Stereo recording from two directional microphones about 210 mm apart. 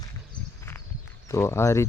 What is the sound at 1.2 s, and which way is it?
Speech, 10° left (ahead or behind).